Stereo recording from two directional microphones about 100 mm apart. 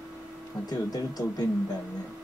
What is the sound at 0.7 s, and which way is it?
Speech, 40° left (ahead or behind).